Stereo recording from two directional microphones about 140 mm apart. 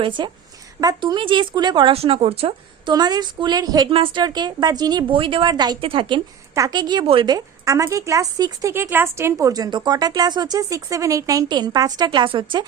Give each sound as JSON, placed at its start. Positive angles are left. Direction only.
{"t": 0.0, "sound": "speech", "side_deg": -35}
{"t": 2.9, "sound": "speech", "side_deg": -30}
{"t": 6.5, "sound": "speech", "side_deg": -25}
{"t": 7.3, "sound": "speech", "side_deg": -25}